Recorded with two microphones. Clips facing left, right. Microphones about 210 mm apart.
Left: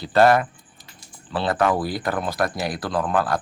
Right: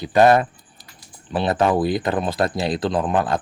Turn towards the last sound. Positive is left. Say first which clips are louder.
# right 2 dB
turn(degrees=-20)  # may be behind; listen again after turning